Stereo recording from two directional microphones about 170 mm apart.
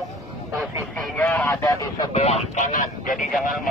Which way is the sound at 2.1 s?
40° left (ahead or behind).